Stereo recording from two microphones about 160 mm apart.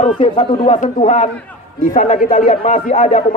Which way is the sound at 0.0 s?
40° left (ahead or behind).